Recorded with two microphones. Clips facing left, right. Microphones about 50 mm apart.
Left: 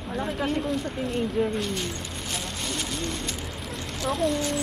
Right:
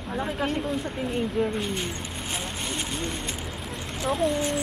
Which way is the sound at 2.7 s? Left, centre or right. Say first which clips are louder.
Left 1 dB; right.